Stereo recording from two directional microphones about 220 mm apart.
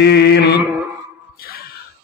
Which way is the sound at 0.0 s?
50° left (ahead or behind).